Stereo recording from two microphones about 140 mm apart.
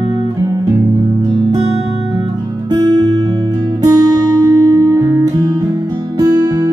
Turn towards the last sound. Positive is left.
turn(degrees=-25)  # may be behind; listen again after turning